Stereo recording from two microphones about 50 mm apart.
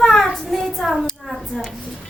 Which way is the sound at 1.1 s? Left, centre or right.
Centre.